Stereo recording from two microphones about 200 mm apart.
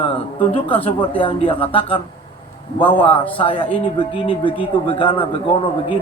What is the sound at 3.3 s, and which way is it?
Speech, 25° left (ahead or behind).